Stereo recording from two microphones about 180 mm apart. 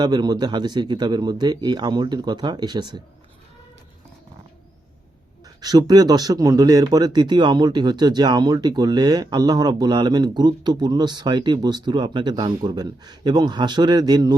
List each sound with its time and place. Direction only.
0.0 s speech: 25° right (ahead or behind)
5.5 s speech: 20° right (ahead or behind)